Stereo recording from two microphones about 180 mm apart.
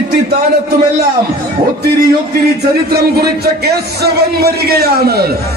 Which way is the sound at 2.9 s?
60° right (ahead or behind).